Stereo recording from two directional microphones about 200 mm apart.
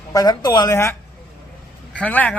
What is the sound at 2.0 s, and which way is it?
Speech, 10° left (ahead or behind).